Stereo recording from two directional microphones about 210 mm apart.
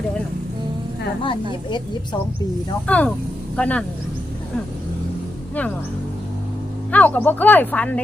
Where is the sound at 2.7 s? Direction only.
5° left (ahead or behind).